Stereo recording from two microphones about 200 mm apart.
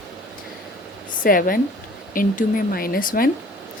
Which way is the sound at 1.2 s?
45° left (ahead or behind).